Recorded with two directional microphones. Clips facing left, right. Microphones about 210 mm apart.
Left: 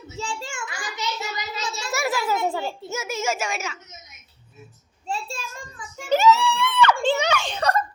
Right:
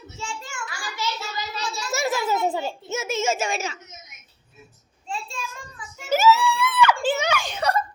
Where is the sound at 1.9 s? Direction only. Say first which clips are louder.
Right 1 dB; 25° right (ahead or behind).